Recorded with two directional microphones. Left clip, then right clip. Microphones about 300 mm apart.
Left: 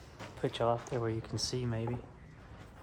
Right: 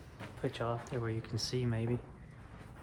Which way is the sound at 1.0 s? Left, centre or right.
Centre.